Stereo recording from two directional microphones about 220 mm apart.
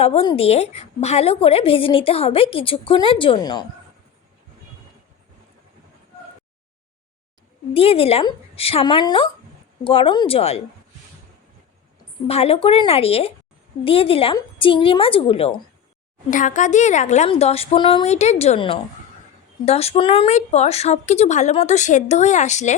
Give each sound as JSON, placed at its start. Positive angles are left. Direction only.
{"t": 0.0, "sound": "a woman's voice", "side_deg": 25}
{"t": 7.7, "sound": "a woman's voice", "side_deg": 25}
{"t": 12.3, "sound": "a woman's voice", "side_deg": 25}